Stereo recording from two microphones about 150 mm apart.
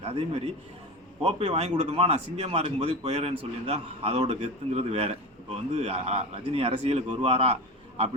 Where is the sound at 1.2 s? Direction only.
45° right (ahead or behind).